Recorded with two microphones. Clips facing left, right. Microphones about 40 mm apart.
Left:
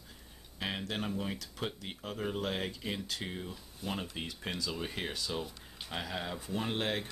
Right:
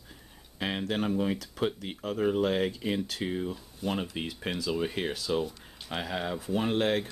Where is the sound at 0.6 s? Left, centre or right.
Right.